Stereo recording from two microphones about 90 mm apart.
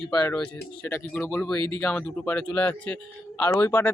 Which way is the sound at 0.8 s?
25° left (ahead or behind).